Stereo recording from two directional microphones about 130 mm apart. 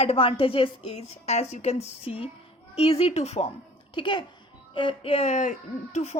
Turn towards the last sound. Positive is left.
turn(degrees=60)  # may be behind; listen again after turning